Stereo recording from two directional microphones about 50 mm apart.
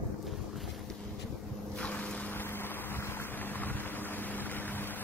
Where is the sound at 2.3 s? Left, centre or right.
Left.